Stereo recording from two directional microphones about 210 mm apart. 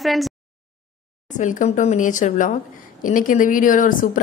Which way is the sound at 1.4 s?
35° left (ahead or behind).